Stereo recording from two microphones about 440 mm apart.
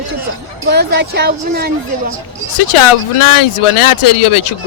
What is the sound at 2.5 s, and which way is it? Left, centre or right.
Speech, left.